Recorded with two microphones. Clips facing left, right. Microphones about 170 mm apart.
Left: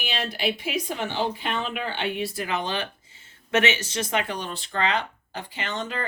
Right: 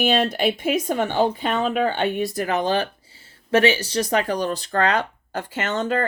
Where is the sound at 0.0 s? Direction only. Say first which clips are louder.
Right 9 dB; 50° right (ahead or behind).